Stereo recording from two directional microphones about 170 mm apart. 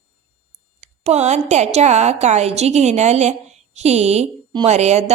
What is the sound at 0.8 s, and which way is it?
A woman's voice, 40° right (ahead or behind).